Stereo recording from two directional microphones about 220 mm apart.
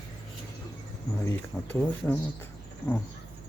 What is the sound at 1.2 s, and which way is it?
Speech, 10° left (ahead or behind).